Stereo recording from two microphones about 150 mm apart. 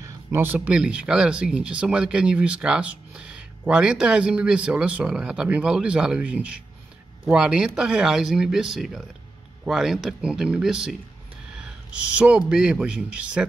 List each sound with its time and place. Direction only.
0.0 s a sound: 15° right (ahead or behind)
0.6 s speech: 5° right (ahead or behind)
12.2 s speech: 5° right (ahead or behind)